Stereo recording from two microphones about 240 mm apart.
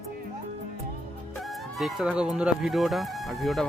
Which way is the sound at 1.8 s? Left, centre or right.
Centre.